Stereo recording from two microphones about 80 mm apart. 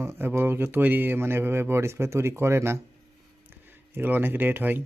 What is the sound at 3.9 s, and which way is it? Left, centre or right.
Speech, right.